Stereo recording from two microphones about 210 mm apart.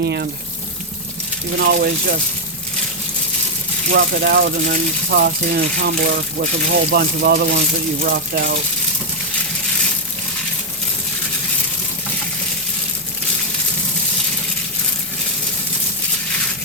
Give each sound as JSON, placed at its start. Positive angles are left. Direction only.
{"t": 0.0, "sound": "speech", "side_deg": -50}
{"t": 1.5, "sound": "speech", "side_deg": -50}
{"t": 3.9, "sound": "speech", "side_deg": -50}